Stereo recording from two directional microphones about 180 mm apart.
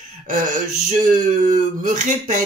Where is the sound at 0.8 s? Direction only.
45° right (ahead or behind).